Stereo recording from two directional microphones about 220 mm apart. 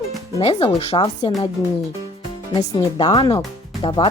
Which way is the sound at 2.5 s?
20° left (ahead or behind).